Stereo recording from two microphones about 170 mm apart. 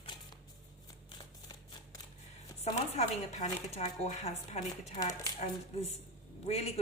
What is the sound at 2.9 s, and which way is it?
A woman's voice, 40° left (ahead or behind).